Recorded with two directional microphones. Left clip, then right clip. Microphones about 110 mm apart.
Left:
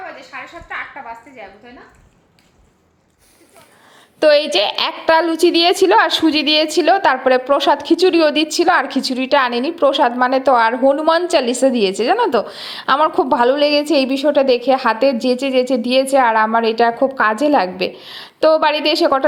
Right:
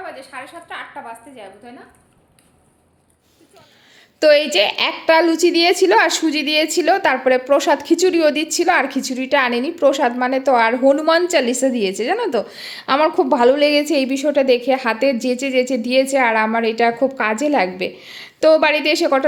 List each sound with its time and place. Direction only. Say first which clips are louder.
0.3 s a woman's voice: left 2 dB; 30° right (ahead or behind)
4.2 s a woman's voice: even; 10° right (ahead or behind)
18.3 s a woman's voice: even; 10° right (ahead or behind)